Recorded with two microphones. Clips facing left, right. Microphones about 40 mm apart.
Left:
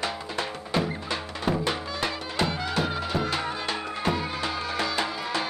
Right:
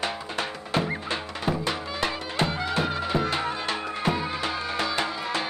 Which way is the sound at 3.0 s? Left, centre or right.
Centre.